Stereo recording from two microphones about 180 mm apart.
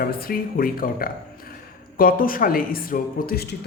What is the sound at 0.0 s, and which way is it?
Speech, 55° left (ahead or behind).